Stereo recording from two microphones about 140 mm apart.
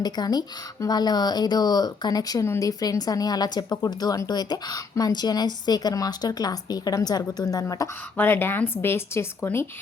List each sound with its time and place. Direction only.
0.0 s speech: 30° left (ahead or behind)
8.1 s speech: 15° left (ahead or behind)